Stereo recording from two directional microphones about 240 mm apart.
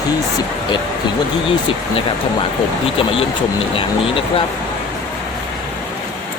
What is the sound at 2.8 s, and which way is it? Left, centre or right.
Speech, left.